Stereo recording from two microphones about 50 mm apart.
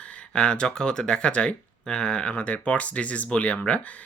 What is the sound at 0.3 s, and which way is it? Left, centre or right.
Speech, centre.